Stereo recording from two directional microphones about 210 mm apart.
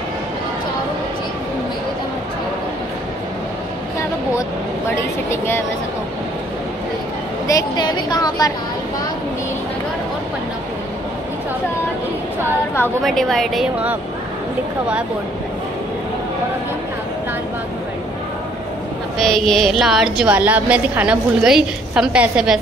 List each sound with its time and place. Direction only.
4.9 s a woman's voice: 10° left (ahead or behind)
7.4 s a woman's voice: 20° left (ahead or behind)
12.7 s a woman's voice: 5° left (ahead or behind)
19.1 s a woman's voice: centre (ahead or behind)